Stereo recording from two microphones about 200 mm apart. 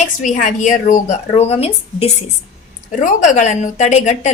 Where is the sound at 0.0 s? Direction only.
40° left (ahead or behind).